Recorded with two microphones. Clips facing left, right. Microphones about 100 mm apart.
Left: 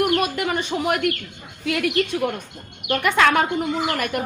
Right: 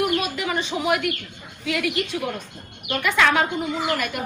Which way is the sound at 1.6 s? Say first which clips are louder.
Left 2 dB; 50° left (ahead or behind).